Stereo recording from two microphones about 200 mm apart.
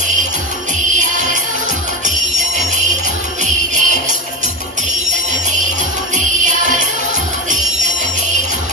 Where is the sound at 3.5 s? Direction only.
40° right (ahead or behind).